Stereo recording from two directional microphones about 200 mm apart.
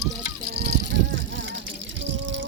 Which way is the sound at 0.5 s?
55° right (ahead or behind).